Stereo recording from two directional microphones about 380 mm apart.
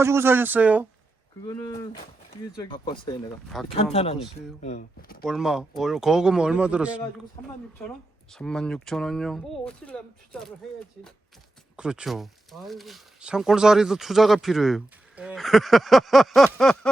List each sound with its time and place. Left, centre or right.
0.0 s speech: centre
1.5 s speech: centre
3.5 s speech: centre
3.9 s speech: centre
5.2 s speech: centre
11.8 s speech: centre